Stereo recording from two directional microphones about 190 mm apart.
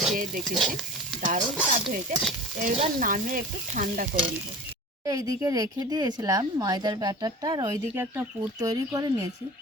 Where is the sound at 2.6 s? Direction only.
40° right (ahead or behind).